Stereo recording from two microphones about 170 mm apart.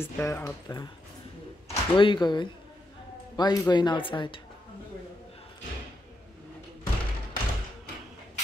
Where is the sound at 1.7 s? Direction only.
30° left (ahead or behind).